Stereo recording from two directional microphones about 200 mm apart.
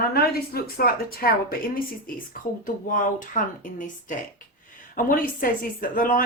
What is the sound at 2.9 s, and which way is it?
Speech, 40° left (ahead or behind).